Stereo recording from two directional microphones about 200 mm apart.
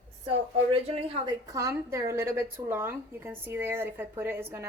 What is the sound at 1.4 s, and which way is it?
A woman's voice, 15° right (ahead or behind).